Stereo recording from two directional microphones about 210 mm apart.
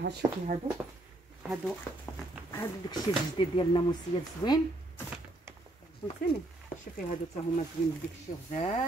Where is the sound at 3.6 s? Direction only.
20° left (ahead or behind).